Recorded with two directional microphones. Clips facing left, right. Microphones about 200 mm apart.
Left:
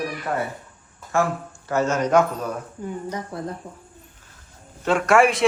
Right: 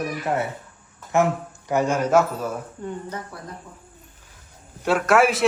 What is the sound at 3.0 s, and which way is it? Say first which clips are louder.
Speech: left 4 dB; 15° left (ahead or behind).